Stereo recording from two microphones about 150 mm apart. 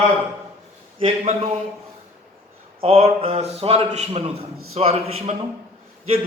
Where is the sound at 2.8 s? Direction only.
40° right (ahead or behind).